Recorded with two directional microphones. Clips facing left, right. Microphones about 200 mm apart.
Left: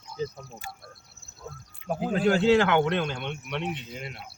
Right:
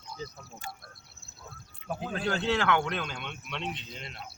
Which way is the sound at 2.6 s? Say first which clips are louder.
Left 6 dB; 25° left (ahead or behind).